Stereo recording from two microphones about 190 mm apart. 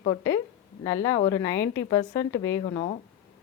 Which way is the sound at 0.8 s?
20° left (ahead or behind).